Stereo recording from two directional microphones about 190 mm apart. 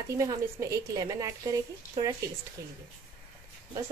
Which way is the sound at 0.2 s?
15° right (ahead or behind).